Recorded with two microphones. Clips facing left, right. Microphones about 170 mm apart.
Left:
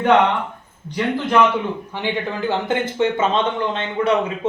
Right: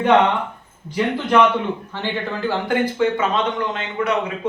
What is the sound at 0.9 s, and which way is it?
Speech, 5° right (ahead or behind).